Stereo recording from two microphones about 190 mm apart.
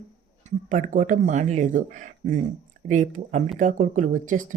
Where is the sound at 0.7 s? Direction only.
40° right (ahead or behind).